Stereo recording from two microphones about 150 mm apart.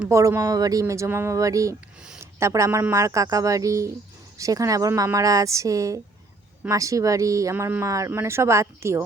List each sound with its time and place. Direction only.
0.1 s speech: 20° right (ahead or behind)